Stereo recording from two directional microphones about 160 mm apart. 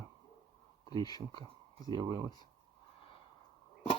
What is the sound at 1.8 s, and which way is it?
Speech, 25° right (ahead or behind).